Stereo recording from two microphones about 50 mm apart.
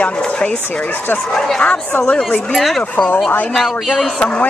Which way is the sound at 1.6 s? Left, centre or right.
Centre.